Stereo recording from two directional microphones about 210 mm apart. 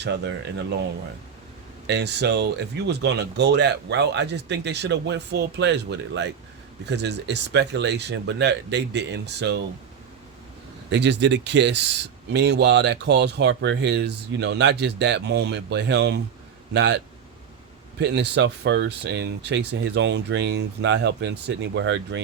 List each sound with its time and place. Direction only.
0.0 s speech: 55° right (ahead or behind)
1.9 s speech: 55° right (ahead or behind)
10.9 s speech: 55° right (ahead or behind)
18.0 s speech: 55° right (ahead or behind)